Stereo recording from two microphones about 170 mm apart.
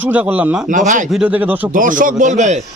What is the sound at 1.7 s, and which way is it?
Speech, 50° right (ahead or behind).